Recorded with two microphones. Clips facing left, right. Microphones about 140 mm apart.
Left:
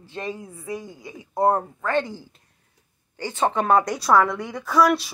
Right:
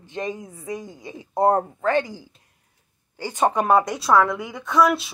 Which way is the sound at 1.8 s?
15° right (ahead or behind).